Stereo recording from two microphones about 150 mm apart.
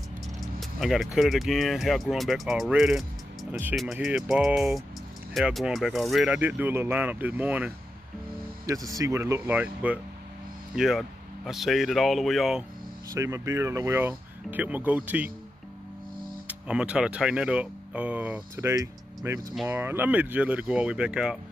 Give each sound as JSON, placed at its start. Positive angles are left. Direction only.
{"t": 0.6, "sound": "speech", "side_deg": 0}
{"t": 8.9, "sound": "speech", "side_deg": -20}
{"t": 13.1, "sound": "speech", "side_deg": -20}
{"t": 16.4, "sound": "speech", "side_deg": -5}